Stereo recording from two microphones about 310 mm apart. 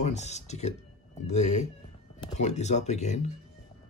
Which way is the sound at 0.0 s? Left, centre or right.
Left.